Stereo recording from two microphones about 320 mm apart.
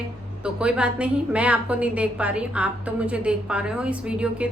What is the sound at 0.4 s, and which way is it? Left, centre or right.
A woman's voice, centre.